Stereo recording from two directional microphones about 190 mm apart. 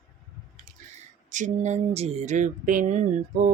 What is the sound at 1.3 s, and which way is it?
Speech, 40° right (ahead or behind).